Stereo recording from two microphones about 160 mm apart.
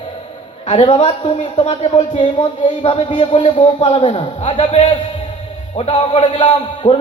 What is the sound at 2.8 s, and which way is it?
A man's voice, 35° left (ahead or behind).